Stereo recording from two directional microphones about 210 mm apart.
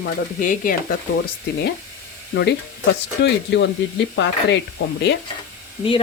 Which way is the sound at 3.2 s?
55° left (ahead or behind).